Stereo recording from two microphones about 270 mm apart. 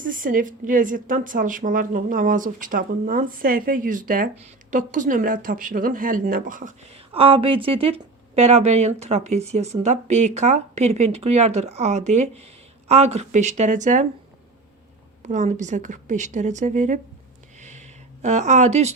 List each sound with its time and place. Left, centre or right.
0.0 s speech: right
15.3 s speech: right
17.6 s a sound: right